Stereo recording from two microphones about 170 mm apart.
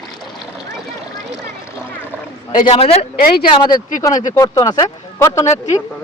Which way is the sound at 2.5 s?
50° left (ahead or behind).